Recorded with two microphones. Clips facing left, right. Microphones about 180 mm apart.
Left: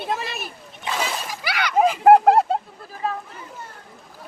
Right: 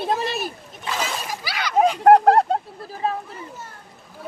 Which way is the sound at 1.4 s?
60° left (ahead or behind).